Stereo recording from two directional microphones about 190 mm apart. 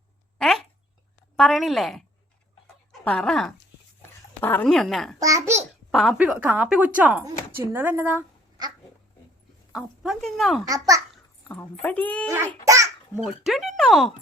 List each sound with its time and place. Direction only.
0.3 s a sound: centre (ahead or behind)
1.4 s speech: centre (ahead or behind)
5.2 s a woman's voice: 15° right (ahead or behind)
5.9 s a woman's voice: centre (ahead or behind)
9.7 s speech: 5° right (ahead or behind)
10.7 s a woman's voice: 15° right (ahead or behind)
11.4 s speech: 10° left (ahead or behind)
12.6 s babbling: 15° right (ahead or behind)
13.2 s speech: centre (ahead or behind)